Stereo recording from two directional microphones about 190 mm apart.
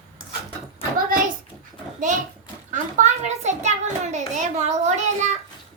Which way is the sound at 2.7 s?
40° right (ahead or behind).